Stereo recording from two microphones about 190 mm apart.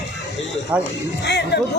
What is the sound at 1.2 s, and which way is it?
Speech, 60° left (ahead or behind).